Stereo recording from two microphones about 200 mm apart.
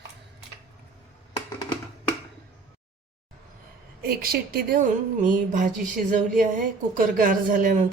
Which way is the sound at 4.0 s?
50° right (ahead or behind).